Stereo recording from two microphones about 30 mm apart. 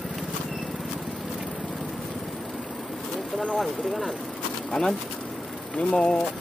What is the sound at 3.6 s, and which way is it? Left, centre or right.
Speech, centre.